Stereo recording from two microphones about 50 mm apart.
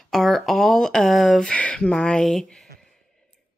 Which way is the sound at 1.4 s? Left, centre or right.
Left.